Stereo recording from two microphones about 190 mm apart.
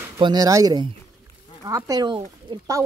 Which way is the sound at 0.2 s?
20° right (ahead or behind).